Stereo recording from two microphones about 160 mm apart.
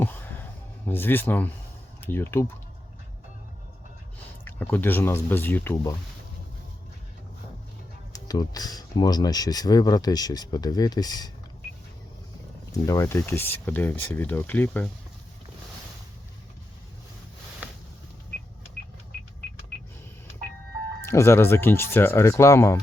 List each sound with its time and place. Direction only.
0.0 s a sound: 10° left (ahead or behind)
2.0 s speech: 15° left (ahead or behind)
4.4 s speech: 10° left (ahead or behind)
8.1 s speech: 25° left (ahead or behind)
12.8 s speech: 20° left (ahead or behind)
21.0 s speech: 15° left (ahead or behind)